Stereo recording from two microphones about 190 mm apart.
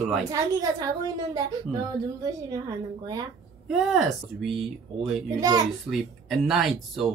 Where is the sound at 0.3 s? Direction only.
20° right (ahead or behind).